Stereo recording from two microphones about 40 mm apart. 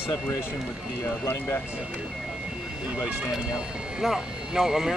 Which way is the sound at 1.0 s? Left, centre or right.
Left.